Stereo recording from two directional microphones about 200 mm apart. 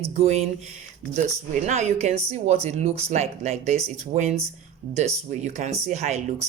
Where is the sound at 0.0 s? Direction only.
30° right (ahead or behind).